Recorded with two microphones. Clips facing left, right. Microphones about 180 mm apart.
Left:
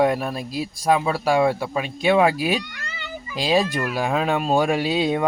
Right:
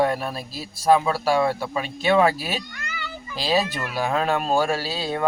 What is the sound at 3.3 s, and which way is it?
Speech, 15° left (ahead or behind).